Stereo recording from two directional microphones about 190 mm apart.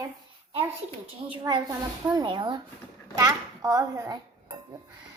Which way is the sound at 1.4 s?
20° right (ahead or behind).